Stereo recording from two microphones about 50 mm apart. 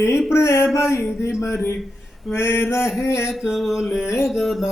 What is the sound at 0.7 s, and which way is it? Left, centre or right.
Speech, left.